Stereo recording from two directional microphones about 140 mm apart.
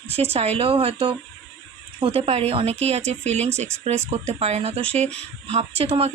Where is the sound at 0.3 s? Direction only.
45° right (ahead or behind).